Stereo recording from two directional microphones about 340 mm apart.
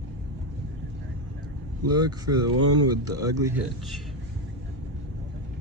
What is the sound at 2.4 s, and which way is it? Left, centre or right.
Speech, right.